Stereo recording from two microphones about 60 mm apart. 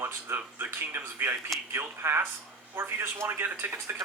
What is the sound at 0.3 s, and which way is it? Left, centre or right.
A man's voice, right.